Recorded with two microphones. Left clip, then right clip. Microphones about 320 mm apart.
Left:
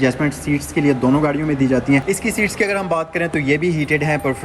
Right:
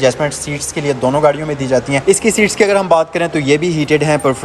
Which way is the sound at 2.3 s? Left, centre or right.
Centre.